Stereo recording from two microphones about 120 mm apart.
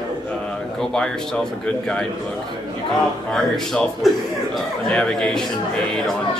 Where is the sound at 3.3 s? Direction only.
5° left (ahead or behind).